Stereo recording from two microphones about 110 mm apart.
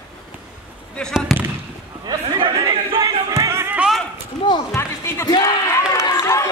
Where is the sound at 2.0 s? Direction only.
45° right (ahead or behind); by 3.8 s 20° right (ahead or behind).